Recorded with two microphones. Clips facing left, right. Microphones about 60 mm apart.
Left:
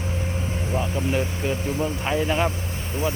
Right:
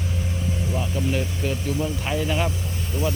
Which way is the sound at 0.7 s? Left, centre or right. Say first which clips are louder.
Left 2 dB; left.